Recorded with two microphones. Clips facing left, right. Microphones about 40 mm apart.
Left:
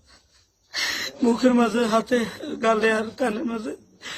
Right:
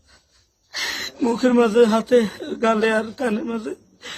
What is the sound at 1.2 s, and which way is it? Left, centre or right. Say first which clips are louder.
Speech: right 2 dB; right.